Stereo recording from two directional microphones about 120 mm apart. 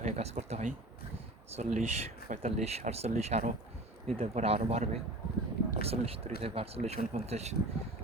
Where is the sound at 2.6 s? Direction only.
65° right (ahead or behind).